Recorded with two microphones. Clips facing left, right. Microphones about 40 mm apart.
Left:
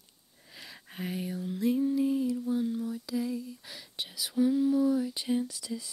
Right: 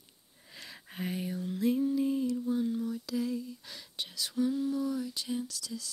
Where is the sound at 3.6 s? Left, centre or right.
Centre.